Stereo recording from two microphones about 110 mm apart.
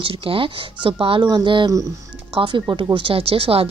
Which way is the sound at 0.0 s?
55° right (ahead or behind).